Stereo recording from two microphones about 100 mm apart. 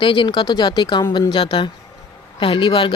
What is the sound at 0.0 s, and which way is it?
Speech, 60° left (ahead or behind).